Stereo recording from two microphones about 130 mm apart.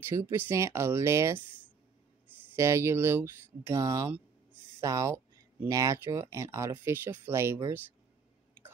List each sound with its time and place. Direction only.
0.1 s speech: 20° right (ahead or behind)
2.5 s speech: 20° right (ahead or behind)